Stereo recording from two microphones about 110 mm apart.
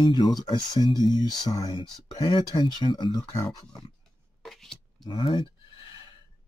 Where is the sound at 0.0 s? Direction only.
40° left (ahead or behind).